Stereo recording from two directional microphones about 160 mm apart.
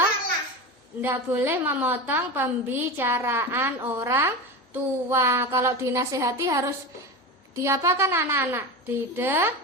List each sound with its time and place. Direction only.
1.0 s a woman's voice: 15° right (ahead or behind)